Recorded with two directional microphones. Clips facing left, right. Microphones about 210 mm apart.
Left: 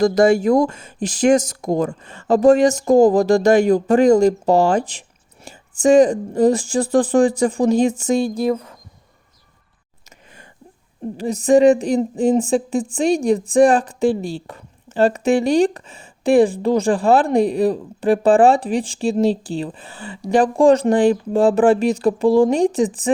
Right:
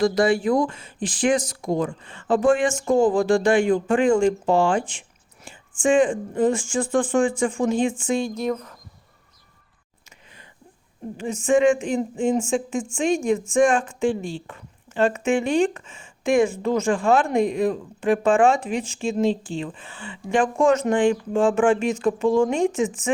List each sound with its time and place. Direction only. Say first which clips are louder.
0.0 s speech: left 5 dB; 45° left (ahead or behind)
11.2 s speech: left 6 dB; 35° left (ahead or behind)